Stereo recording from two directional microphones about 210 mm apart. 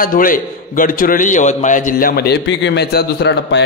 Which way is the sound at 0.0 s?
40° left (ahead or behind).